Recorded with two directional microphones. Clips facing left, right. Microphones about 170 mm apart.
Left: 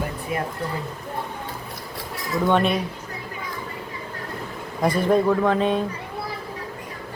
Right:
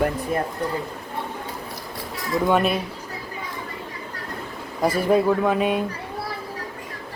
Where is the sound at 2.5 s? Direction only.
5° right (ahead or behind).